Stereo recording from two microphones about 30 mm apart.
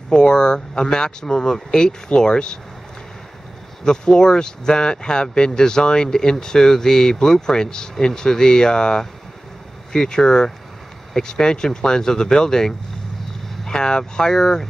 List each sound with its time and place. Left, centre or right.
0.1 s speech: left
3.8 s speech: left